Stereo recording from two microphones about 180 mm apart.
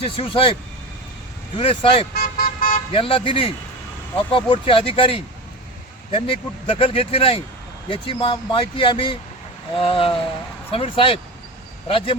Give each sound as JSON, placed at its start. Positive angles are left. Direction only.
{"t": 0.0, "sound": "speech", "side_deg": 30}
{"t": 1.5, "sound": "speech", "side_deg": 30}
{"t": 2.1, "sound": "vehicle", "side_deg": 55}
{"t": 2.9, "sound": "speech", "side_deg": 30}